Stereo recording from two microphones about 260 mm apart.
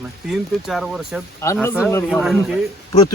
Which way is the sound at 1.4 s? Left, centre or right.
Centre.